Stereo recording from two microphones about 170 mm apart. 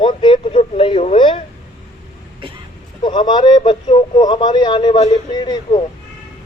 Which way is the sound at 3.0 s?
25° left (ahead or behind).